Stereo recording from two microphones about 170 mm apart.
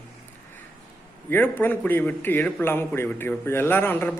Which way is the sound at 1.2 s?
10° left (ahead or behind).